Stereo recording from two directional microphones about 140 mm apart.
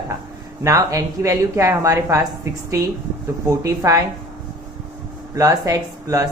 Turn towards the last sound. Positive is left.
turn(degrees=-25)  # may be behind; listen again after turning